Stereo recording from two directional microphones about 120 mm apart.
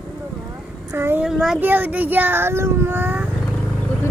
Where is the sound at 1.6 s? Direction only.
15° right (ahead or behind).